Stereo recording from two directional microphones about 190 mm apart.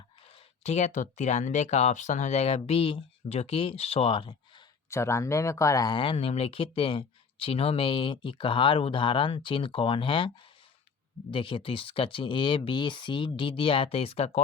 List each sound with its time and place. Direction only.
0.6 s speech: 35° left (ahead or behind)
4.9 s speech: 15° left (ahead or behind); by 14.4 s 30° left (ahead or behind)